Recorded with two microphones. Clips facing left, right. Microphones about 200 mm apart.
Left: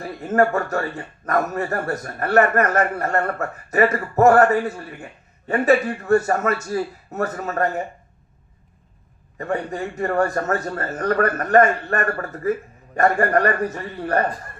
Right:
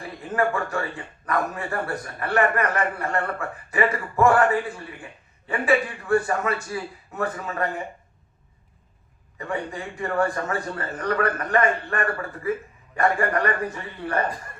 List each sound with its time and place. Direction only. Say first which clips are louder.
0.2 s speech: left 6 dB; 45° left (ahead or behind)
9.4 s speech: left 5 dB; 45° left (ahead or behind)